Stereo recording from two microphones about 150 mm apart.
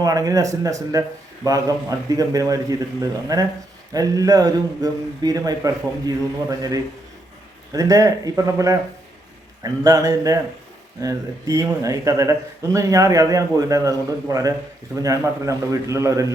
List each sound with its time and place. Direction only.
0.0 s speech: 25° right (ahead or behind)